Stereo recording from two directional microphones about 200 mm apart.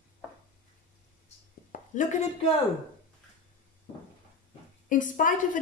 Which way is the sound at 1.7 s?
40° left (ahead or behind).